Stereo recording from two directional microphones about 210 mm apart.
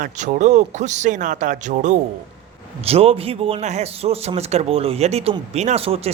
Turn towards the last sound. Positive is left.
turn(degrees=-30)  # may be behind; listen again after turning